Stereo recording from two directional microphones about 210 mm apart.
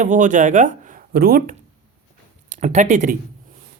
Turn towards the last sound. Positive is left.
turn(degrees=-35)  # may be behind; listen again after turning